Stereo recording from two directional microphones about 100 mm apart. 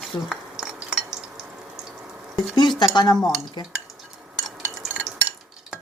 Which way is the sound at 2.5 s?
50° left (ahead or behind).